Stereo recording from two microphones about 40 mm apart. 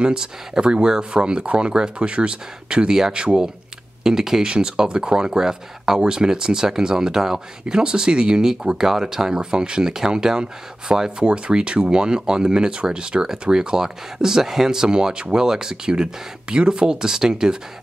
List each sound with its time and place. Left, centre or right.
0.0 s speech: centre
4.0 s speech: centre